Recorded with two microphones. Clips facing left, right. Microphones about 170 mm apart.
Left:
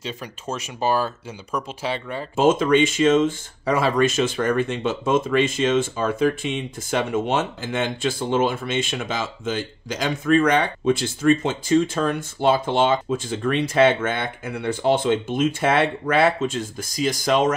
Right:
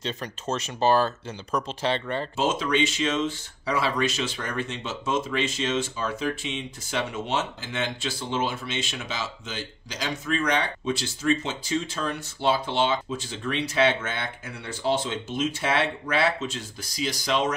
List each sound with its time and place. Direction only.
0.0 s speech: 10° left (ahead or behind)
2.3 s speech: 50° left (ahead or behind)